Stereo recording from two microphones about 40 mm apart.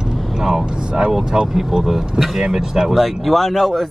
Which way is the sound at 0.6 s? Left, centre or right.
Right.